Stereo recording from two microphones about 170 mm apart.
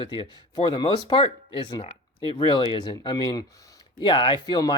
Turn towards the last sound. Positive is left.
turn(degrees=25)  # may be behind; listen again after turning